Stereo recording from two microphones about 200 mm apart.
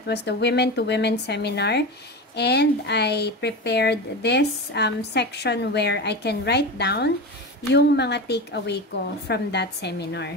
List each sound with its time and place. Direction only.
0.0 s speech: 55° left (ahead or behind)